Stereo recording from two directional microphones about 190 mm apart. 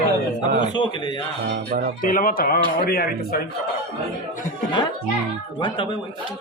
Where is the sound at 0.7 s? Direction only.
25° left (ahead or behind).